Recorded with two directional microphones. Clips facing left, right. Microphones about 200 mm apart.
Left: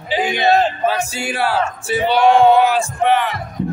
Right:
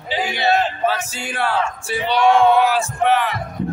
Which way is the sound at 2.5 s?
Centre (ahead or behind).